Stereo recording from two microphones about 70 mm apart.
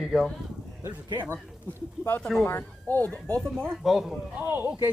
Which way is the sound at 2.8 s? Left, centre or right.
Left.